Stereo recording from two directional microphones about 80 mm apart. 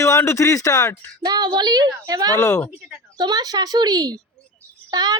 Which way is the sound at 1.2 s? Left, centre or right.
Right.